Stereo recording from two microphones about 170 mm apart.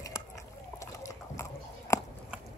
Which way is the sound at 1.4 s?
15° left (ahead or behind).